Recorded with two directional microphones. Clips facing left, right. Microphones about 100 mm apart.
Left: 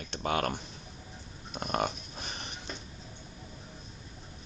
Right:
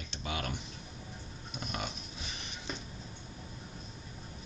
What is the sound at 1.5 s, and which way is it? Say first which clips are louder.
Pig: left 8 dB; 50° left (ahead or behind).